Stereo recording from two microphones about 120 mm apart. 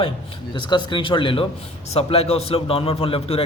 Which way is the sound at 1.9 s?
55° left (ahead or behind).